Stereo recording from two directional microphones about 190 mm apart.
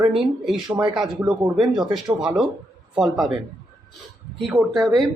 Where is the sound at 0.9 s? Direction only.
5° right (ahead or behind).